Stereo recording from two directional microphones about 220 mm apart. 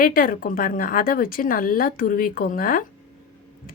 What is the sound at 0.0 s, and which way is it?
A woman's voice, 40° left (ahead or behind).